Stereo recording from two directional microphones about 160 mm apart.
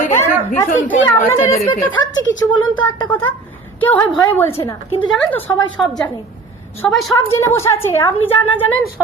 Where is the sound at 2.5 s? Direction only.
30° left (ahead or behind).